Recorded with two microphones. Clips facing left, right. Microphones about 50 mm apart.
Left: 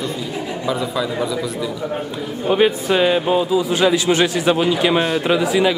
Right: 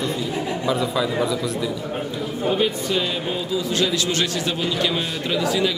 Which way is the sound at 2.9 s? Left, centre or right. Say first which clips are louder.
Left 8 dB; left.